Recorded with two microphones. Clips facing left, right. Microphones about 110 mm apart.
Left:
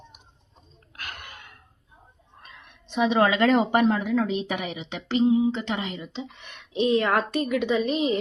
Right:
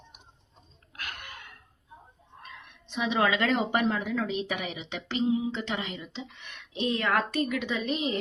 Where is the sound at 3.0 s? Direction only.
45° left (ahead or behind).